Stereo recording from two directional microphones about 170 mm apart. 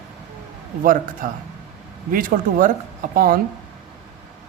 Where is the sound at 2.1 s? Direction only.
55° right (ahead or behind).